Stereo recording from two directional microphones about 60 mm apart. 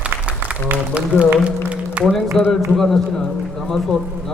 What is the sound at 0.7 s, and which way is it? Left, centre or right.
Speech, right.